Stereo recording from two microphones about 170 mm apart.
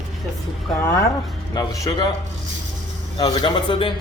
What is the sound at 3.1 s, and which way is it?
Speech, 30° left (ahead or behind).